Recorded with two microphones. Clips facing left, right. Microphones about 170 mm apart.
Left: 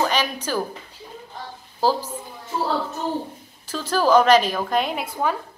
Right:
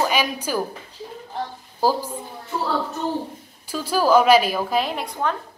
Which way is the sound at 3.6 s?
10° right (ahead or behind).